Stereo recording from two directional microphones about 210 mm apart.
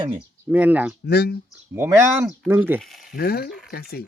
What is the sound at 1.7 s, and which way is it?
Speech, 10° right (ahead or behind).